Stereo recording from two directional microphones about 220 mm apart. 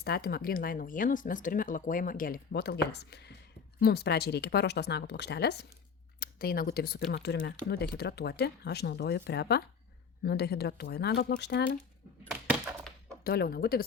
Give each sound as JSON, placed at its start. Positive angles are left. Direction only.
{"t": 0.0, "sound": "speech", "side_deg": 45}
{"t": 12.3, "sound": "a sound", "side_deg": -5}
{"t": 13.2, "sound": "speech", "side_deg": 45}